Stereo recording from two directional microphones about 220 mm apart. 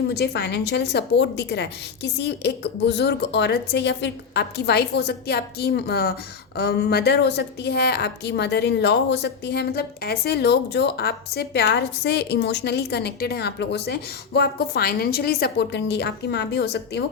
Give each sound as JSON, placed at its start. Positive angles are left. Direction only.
{"t": 0.1, "sound": "a woman's voice", "side_deg": 50}